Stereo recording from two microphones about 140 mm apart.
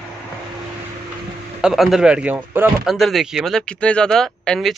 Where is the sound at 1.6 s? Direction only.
5° right (ahead or behind).